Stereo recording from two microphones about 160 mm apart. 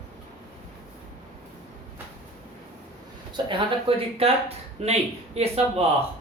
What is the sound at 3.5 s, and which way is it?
Speech, 35° right (ahead or behind).